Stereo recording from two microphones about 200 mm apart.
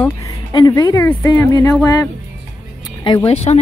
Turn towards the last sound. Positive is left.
turn(degrees=30)  # may be behind; listen again after turning